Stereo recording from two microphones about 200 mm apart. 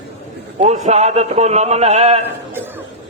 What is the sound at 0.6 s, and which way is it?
A man's voice, 35° right (ahead or behind).